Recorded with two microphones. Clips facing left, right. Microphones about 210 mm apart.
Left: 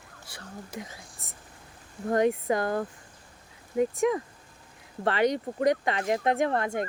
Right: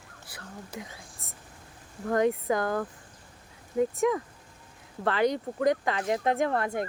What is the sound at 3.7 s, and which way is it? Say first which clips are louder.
Speech: left 1 dB; centre (ahead or behind).